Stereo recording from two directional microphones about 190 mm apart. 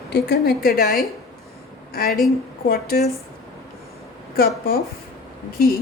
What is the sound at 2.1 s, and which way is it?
Speech, centre (ahead or behind).